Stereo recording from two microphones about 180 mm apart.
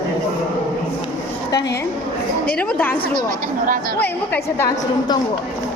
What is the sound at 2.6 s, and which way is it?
Speech, 5° left (ahead or behind).